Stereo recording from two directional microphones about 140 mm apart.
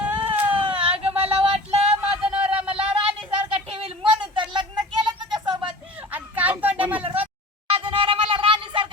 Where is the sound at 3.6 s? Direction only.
40° right (ahead or behind).